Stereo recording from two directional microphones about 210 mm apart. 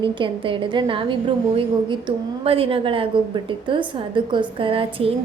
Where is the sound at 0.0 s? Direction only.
25° right (ahead or behind).